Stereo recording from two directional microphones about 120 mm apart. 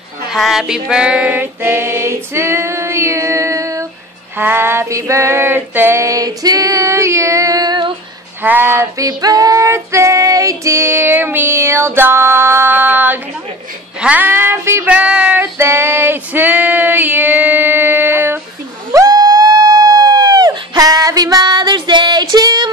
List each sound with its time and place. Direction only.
0.3 s female singing: 5° right (ahead or behind); by 7.9 s 35° right (ahead or behind)
8.4 s female singing: 15° right (ahead or behind)
14.9 s speech: 10° right (ahead or behind)
15.5 s female singing: 20° right (ahead or behind)
18.9 s a sound: 30° right (ahead or behind)